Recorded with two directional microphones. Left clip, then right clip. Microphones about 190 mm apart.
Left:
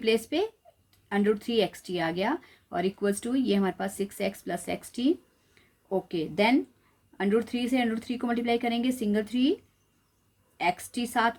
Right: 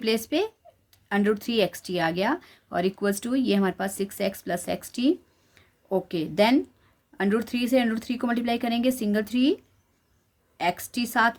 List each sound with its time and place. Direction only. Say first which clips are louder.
0.0 s speech: right 1 dB; 25° right (ahead or behind)
10.6 s speech: right 2 dB; 25° right (ahead or behind)